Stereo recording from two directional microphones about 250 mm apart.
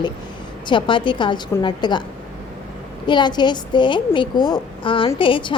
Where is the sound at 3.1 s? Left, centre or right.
Centre.